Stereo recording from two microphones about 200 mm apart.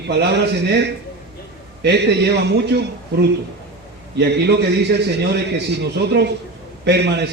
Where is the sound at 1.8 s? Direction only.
55° right (ahead or behind).